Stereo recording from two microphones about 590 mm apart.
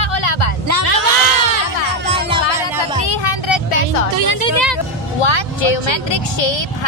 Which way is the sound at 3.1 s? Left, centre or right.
Left.